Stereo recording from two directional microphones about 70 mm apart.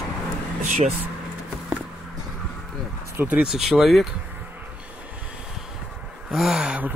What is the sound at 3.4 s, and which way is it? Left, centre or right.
Speech, centre.